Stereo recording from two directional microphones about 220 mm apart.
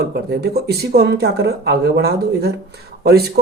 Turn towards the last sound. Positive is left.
turn(degrees=-45)  # may be behind; listen again after turning